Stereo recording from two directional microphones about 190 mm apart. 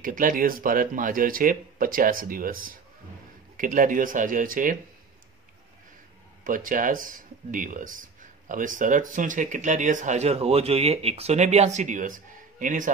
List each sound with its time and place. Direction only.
0.0 s speech: 45° right (ahead or behind)
6.4 s speech: 45° right (ahead or behind)